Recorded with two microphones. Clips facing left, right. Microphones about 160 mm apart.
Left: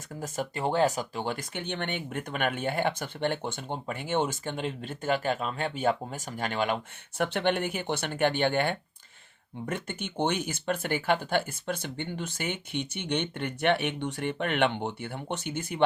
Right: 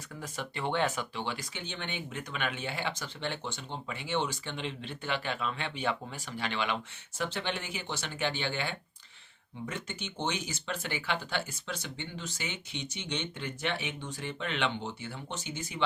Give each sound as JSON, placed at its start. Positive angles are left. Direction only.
{"t": 0.2, "sound": "speech", "side_deg": 40}
{"t": 7.2, "sound": "speech", "side_deg": 60}